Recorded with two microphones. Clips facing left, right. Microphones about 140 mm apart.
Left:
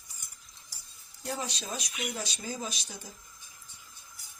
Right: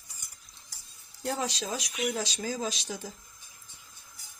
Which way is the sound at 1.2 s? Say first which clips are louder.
Right 4 dB; 90° right.